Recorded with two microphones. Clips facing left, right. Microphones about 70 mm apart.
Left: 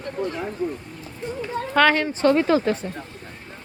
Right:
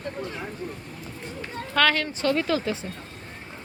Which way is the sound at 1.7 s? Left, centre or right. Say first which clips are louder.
Left 4 dB; left.